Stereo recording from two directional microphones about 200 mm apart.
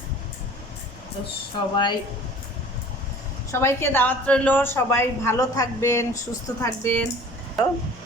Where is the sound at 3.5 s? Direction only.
15° left (ahead or behind).